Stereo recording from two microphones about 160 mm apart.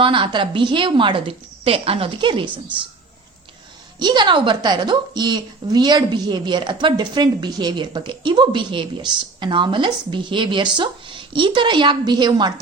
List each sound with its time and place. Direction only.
0.0 s a woman's voice: 30° right (ahead or behind)
4.0 s a woman's voice: 30° right (ahead or behind)